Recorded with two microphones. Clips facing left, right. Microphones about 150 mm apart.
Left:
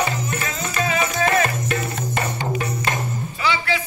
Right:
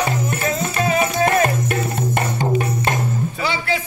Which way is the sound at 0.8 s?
45° right (ahead or behind).